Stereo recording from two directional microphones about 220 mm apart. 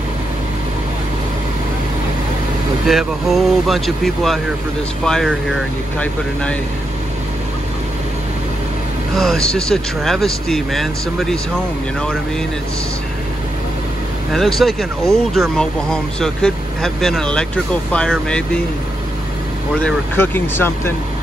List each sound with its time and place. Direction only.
2.9 s speech: centre (ahead or behind)
9.1 s speech: centre (ahead or behind)
14.3 s speech: centre (ahead or behind)
19.8 s speech: 5° left (ahead or behind)